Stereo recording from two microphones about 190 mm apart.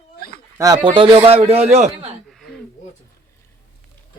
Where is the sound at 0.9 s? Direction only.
25° right (ahead or behind).